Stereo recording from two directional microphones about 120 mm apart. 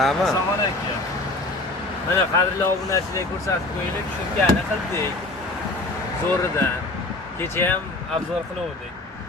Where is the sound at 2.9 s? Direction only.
30° left (ahead or behind).